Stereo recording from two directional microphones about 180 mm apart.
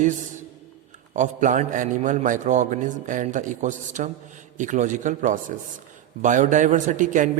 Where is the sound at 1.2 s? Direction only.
45° right (ahead or behind).